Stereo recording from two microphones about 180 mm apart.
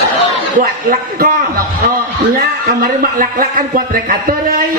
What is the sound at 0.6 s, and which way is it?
A man's voice, 50° right (ahead or behind).